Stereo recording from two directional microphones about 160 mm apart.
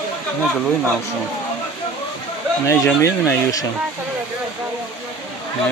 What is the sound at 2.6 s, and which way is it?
Speech, 20° left (ahead or behind).